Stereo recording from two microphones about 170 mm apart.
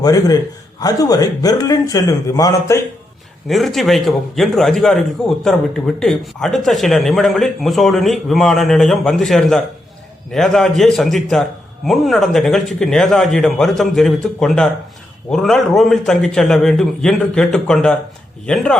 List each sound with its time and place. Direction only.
0.0 s speech: 20° left (ahead or behind)
3.5 s a man's voice: centre (ahead or behind)